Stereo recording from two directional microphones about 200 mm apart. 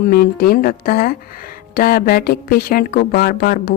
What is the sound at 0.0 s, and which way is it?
Speech, 50° left (ahead or behind).